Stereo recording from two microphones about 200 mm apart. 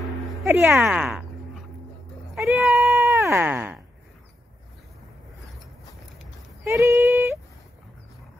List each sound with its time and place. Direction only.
0.0 s speech: centre (ahead or behind)
2.3 s speech: centre (ahead or behind)
3.0 s a sound: 15° right (ahead or behind)
6.8 s speech: 15° right (ahead or behind)